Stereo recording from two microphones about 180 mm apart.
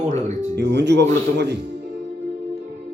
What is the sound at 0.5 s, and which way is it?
Speech, 70° right (ahead or behind).